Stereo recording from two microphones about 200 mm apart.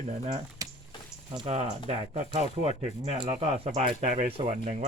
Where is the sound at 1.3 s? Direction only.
25° right (ahead or behind).